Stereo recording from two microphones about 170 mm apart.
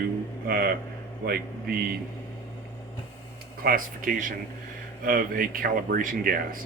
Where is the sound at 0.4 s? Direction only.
65° right (ahead or behind).